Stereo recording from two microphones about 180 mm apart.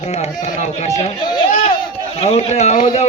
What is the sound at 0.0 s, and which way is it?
Speech, 35° left (ahead or behind).